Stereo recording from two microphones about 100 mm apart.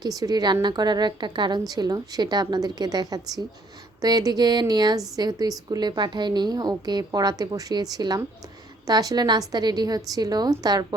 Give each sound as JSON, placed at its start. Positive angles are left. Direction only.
{"t": 0.2, "sound": "a woman's voice", "side_deg": -40}